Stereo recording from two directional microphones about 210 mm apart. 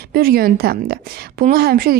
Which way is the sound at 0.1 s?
45° right (ahead or behind).